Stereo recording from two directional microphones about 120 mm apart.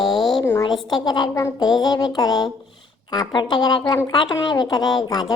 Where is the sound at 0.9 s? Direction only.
35° left (ahead or behind).